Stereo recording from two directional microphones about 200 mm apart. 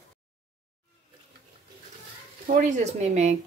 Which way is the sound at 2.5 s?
35° right (ahead or behind).